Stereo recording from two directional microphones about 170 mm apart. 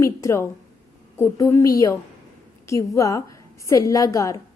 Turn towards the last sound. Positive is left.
turn(degrees=20)  # may be behind; listen again after turning